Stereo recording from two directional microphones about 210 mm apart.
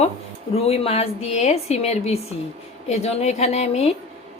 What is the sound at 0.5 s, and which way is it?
A woman's voice, 30° left (ahead or behind).